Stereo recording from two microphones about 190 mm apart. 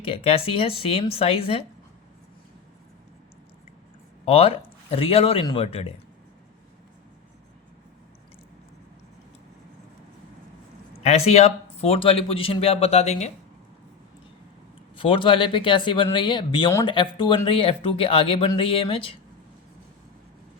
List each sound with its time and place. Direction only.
0.0 s a man's voice: 30° left (ahead or behind)
4.3 s a man's voice: 30° left (ahead or behind)
11.0 s a man's voice: 35° left (ahead or behind)
14.9 s speech: 25° left (ahead or behind)